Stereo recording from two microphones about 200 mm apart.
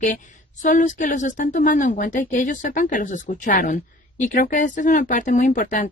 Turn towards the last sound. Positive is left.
turn(degrees=40)  # may be behind; listen again after turning